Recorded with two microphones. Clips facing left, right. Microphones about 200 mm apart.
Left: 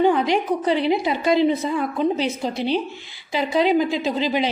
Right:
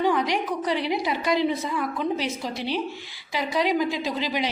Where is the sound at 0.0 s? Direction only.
25° left (ahead or behind).